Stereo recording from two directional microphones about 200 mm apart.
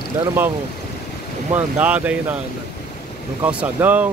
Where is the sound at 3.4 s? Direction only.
10° right (ahead or behind).